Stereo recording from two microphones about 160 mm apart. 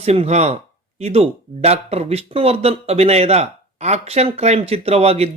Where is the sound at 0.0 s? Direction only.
40° right (ahead or behind).